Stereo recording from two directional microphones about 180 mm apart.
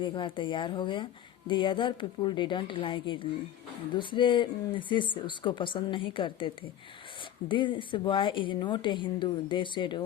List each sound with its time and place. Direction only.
0.0 s speech: 25° left (ahead or behind)